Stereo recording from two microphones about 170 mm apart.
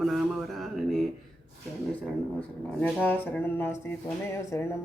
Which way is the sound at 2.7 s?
10° left (ahead or behind).